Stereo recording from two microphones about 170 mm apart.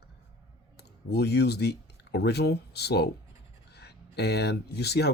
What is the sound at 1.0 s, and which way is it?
Speech, 75° left (ahead or behind).